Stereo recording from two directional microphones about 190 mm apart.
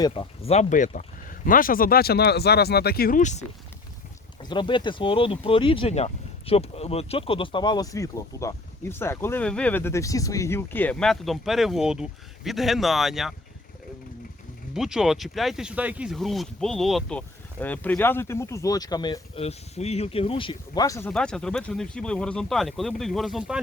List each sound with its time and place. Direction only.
0.0 s speech: 30° left (ahead or behind)
4.4 s speech: 25° left (ahead or behind); by 13.3 s centre (ahead or behind)
14.7 s speech: centre (ahead or behind); by 19.2 s 20° left (ahead or behind)
19.4 s speech: 35° left (ahead or behind); by 21.1 s 15° left (ahead or behind)
21.1 s speech: 5° left (ahead or behind)